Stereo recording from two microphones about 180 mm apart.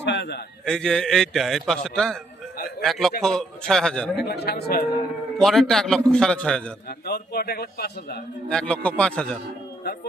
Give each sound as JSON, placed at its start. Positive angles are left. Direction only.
{"t": 0.0, "sound": "a man's voice", "side_deg": 75}
{"t": 0.6, "sound": "a man's voice", "side_deg": 5}
{"t": 4.2, "sound": "a man's voice", "side_deg": 65}
{"t": 5.4, "sound": "a man's voice", "side_deg": 0}
{"t": 7.0, "sound": "a man's voice", "side_deg": 60}
{"t": 8.4, "sound": "a man's voice", "side_deg": 5}